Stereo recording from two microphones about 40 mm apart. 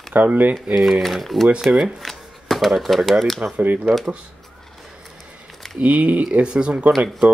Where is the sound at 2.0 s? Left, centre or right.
Centre.